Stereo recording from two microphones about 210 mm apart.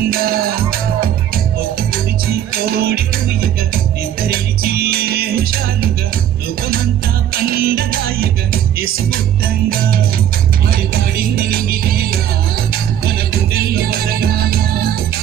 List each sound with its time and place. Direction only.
0.1 s music: 45° right (ahead or behind)
2.6 s music: 45° right (ahead or behind)
7.4 s music: 45° right (ahead or behind)
11.1 s music: 45° right (ahead or behind)
13.5 s music: 45° right (ahead or behind)